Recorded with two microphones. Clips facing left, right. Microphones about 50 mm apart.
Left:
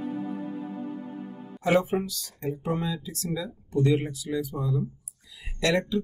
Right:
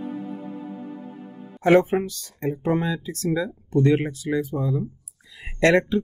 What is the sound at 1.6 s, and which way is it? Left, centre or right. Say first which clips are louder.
Speech: right 6 dB; right.